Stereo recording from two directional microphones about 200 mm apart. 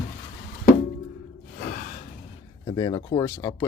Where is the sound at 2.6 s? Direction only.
20° left (ahead or behind).